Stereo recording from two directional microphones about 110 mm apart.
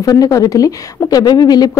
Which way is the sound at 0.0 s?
35° left (ahead or behind).